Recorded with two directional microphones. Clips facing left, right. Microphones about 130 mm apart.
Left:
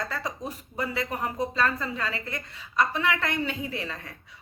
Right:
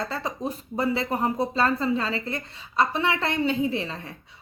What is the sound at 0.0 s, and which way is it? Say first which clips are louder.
A woman's voice: right 3 dB; 30° right (ahead or behind).